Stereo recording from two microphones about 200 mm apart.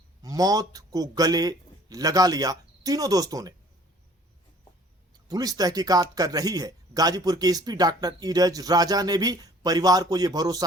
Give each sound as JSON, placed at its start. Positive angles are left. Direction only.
{"t": 0.2, "sound": "a man's voice", "side_deg": -20}
{"t": 5.3, "sound": "a man's voice", "side_deg": -20}